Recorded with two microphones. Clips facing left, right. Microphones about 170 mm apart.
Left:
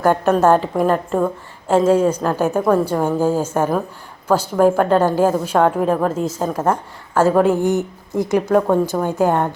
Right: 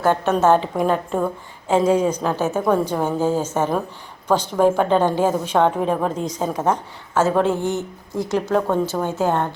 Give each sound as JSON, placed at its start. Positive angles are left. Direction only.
{"t": 0.4, "sound": "a woman's voice", "side_deg": 0}
{"t": 8.4, "sound": "a woman's voice", "side_deg": 5}